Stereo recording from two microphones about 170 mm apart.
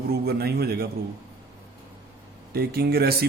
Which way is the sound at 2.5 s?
65° right (ahead or behind).